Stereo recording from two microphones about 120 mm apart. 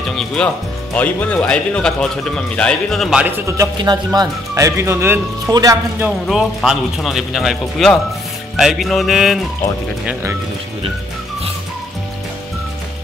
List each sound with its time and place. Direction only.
0.1 s a man's voice: 5° left (ahead or behind)
3.7 s speech: 35° right (ahead or behind); by 5.2 s 20° right (ahead or behind)
5.5 s speech: 30° right (ahead or behind)
6.2 s speech: 5° right (ahead or behind)